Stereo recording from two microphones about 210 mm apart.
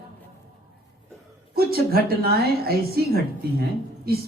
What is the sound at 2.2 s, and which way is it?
A woman's voice, 45° right (ahead or behind).